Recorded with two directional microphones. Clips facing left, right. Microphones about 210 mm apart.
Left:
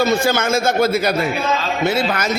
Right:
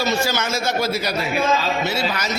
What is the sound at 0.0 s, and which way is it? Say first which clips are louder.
A man's voice: left 5 dB; 55° left (ahead or behind).